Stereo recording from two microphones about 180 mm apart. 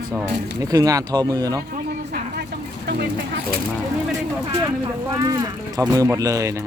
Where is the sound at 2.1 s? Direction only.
65° right (ahead or behind).